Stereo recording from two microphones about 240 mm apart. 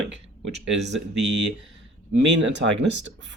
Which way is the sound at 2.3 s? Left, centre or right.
Right.